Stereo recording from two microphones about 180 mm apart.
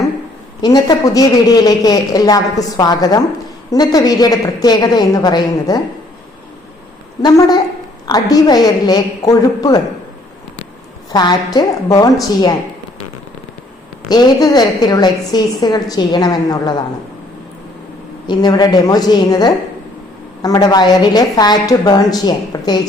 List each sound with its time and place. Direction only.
0.6 s a woman's voice: 20° left (ahead or behind)
7.2 s a woman's voice: 20° left (ahead or behind)
11.1 s a woman's voice: 25° left (ahead or behind)
14.1 s a woman's voice: 20° left (ahead or behind)
18.3 s a woman's voice: 25° left (ahead or behind)